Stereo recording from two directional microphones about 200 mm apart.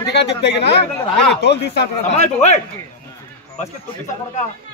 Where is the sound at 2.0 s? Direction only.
35° left (ahead or behind).